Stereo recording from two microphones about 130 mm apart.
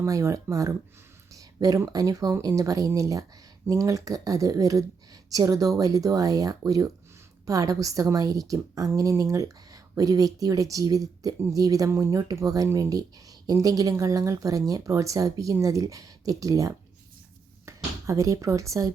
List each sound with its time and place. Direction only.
0.0 s a woman's voice: 25° right (ahead or behind)